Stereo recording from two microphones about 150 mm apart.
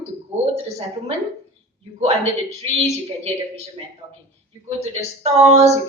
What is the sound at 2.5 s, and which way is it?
Speech, 45° right (ahead or behind).